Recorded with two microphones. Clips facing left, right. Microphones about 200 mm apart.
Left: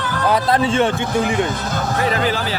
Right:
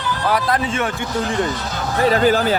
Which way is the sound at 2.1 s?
45° right (ahead or behind).